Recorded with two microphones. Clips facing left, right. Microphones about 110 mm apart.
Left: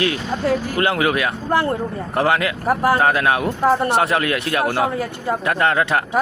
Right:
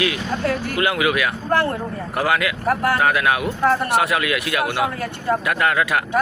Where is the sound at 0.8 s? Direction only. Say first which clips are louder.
Right 1 dB; 35° left (ahead or behind).